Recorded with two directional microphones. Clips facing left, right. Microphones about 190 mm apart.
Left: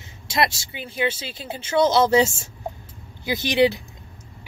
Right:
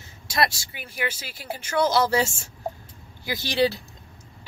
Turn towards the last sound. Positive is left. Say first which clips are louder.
# left 4 dB
turn(degrees=20)  # may be behind; listen again after turning